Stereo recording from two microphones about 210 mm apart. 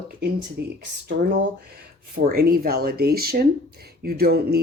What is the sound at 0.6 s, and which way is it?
Speech, 50° right (ahead or behind).